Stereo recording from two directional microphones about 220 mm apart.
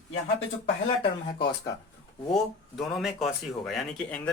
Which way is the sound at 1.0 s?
20° left (ahead or behind).